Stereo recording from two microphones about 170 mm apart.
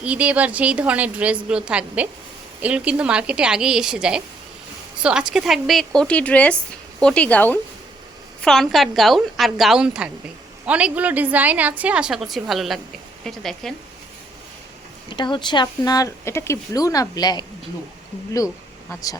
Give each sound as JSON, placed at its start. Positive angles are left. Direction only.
{"t": 0.0, "sound": "a woman's voice", "side_deg": -5}
{"t": 15.1, "sound": "speech", "side_deg": 25}